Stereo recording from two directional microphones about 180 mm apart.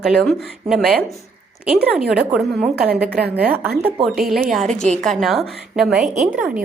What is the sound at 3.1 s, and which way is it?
Speech, 60° right (ahead or behind).